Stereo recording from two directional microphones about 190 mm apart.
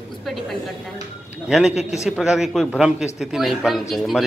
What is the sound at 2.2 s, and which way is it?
A woman's voice, centre (ahead or behind).